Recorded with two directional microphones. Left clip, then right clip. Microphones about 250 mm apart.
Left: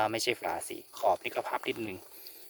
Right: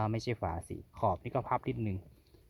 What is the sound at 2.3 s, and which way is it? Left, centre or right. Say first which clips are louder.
Clip-clop: left 13 dB; centre.